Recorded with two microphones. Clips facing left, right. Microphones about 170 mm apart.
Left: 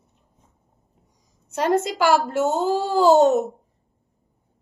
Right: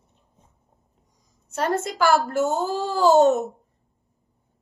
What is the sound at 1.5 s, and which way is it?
A woman's voice, 15° left (ahead or behind).